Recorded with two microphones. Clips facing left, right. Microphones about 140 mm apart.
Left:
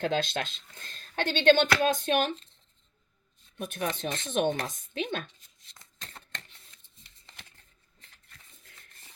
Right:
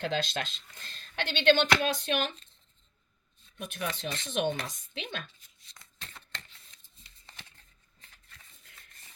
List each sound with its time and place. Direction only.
0.0 s speech: 50° left (ahead or behind)
3.9 s speech: 50° left (ahead or behind)
6.0 s shuffling cards: 40° left (ahead or behind)